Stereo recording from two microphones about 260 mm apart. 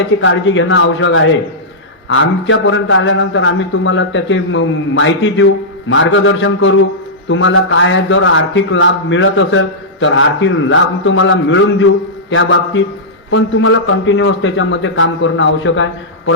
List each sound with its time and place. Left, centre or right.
0.2 s a man's voice: left